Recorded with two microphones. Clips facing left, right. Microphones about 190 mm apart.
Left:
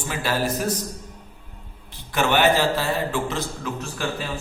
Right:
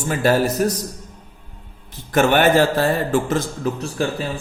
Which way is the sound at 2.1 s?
45° right (ahead or behind).